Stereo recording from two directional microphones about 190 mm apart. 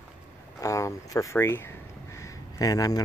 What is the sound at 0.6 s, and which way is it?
Speech, 15° left (ahead or behind).